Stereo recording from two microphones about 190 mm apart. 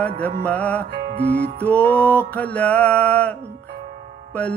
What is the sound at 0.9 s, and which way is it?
Music, 60° right (ahead or behind).